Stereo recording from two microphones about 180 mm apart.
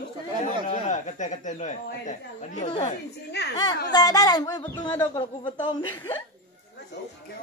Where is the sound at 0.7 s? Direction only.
40° left (ahead or behind).